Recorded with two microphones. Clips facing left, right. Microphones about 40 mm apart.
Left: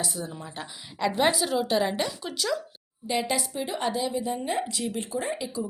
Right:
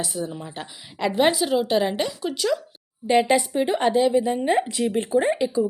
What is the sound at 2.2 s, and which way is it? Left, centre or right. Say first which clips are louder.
A woman's voice: right 5 dB; right.